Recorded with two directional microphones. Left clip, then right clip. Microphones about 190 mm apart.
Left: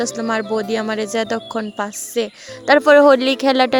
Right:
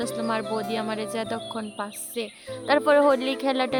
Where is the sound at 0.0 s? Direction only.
35° left (ahead or behind).